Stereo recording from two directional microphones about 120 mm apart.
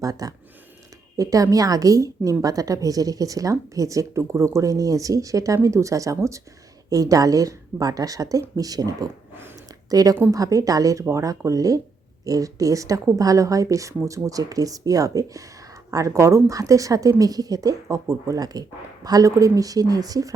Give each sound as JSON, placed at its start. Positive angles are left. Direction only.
{"t": 0.0, "sound": "speech", "side_deg": -30}
{"t": 9.3, "sound": "a sound", "side_deg": -20}
{"t": 9.9, "sound": "speech", "side_deg": -30}